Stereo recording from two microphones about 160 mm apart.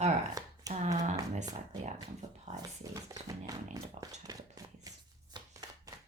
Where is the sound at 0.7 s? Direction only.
45° right (ahead or behind).